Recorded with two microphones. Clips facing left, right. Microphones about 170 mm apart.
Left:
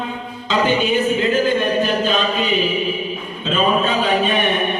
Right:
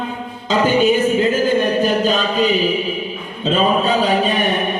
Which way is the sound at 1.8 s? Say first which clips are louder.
Right 2 dB; 40° right (ahead or behind).